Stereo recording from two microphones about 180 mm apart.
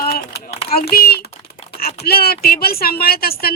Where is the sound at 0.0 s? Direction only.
55° left (ahead or behind).